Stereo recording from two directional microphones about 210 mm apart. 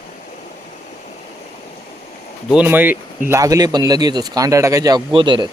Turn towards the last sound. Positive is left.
turn(degrees=-20)  # may be behind; listen again after turning